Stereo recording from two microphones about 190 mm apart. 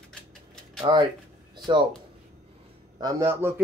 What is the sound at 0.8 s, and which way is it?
Speech, 25° right (ahead or behind).